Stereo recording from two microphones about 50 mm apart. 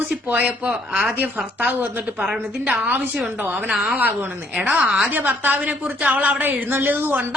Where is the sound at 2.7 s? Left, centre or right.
Right.